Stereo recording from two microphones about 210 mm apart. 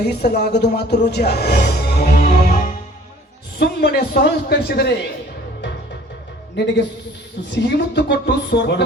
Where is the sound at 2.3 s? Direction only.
40° left (ahead or behind).